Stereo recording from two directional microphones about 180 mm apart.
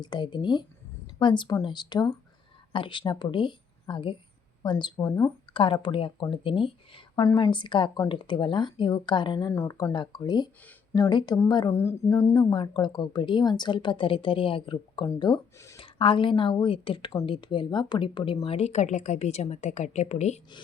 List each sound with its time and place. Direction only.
0.0 s a woman's voice: 25° left (ahead or behind)
5.5 s a woman's voice: 30° left (ahead or behind)
15.8 s a woman's voice: 30° left (ahead or behind)